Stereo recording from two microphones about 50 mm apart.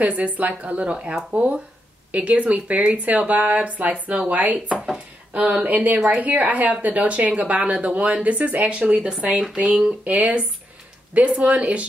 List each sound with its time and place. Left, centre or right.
0.0 s speech: right
1.3 s speech: right
10.0 s speech: right